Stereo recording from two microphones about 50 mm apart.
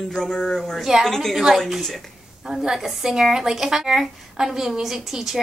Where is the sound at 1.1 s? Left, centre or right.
Centre.